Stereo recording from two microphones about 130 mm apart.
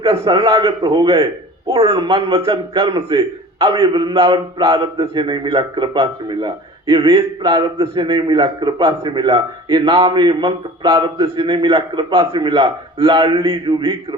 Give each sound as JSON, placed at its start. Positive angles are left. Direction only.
{"t": 0.0, "sound": "a man's voice", "side_deg": -30}
{"t": 2.8, "sound": "speech", "side_deg": -45}
{"t": 3.2, "sound": "a man's voice", "side_deg": -30}
{"t": 9.6, "sound": "a man's voice", "side_deg": -35}